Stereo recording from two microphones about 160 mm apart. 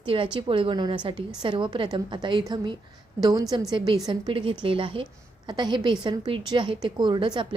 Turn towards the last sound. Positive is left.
turn(degrees=-30)  # may be behind; listen again after turning